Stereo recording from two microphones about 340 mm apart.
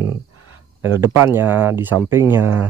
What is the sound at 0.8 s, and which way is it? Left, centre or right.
Speech, centre.